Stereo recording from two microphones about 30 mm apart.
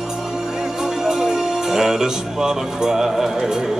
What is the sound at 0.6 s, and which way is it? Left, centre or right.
Music, centre.